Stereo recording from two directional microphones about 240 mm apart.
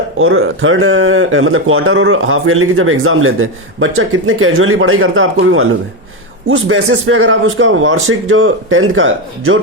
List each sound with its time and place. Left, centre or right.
0.2 s speech: right